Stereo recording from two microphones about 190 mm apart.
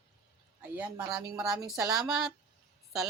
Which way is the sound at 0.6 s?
5° right (ahead or behind).